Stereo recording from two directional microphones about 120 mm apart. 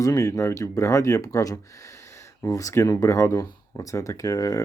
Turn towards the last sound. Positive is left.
turn(degrees=30)  # may be behind; listen again after turning